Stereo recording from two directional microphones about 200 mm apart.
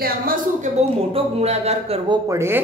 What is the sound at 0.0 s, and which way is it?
Speech, 45° right (ahead or behind).